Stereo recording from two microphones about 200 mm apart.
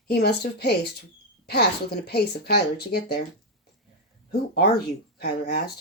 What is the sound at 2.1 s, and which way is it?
Speech, 55° left (ahead or behind).